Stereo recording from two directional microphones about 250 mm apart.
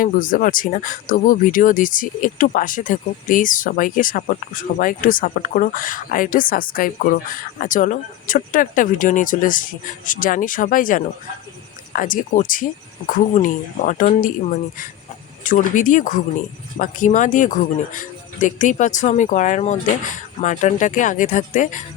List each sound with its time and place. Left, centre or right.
0.0 s speech: left
15.4 s speech: left